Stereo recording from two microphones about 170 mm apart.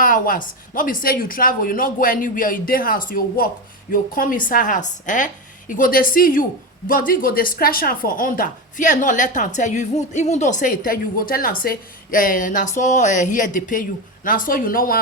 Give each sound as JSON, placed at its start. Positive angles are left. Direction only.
{"t": 0.0, "sound": "a woman's voice", "side_deg": 55}